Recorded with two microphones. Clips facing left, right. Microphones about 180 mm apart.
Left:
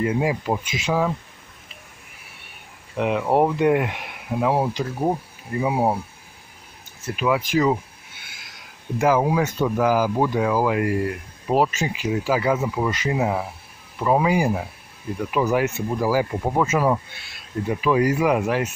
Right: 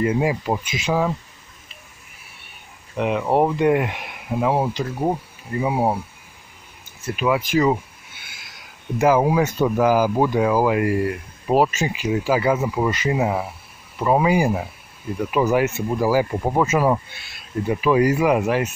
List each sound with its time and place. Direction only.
0.0 s speech: centre (ahead or behind)
3.0 s speech: centre (ahead or behind)
7.2 s speech: 5° right (ahead or behind)
9.0 s speech: 10° right (ahead or behind)